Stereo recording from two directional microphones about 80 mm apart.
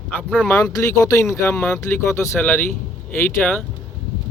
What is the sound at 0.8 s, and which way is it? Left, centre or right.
Speech, left.